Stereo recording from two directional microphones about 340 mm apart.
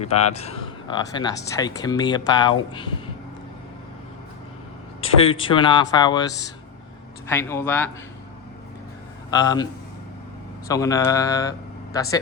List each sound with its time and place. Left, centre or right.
0.0 s speech: centre
5.2 s speech: centre
9.3 s speech: centre
10.7 s speech: centre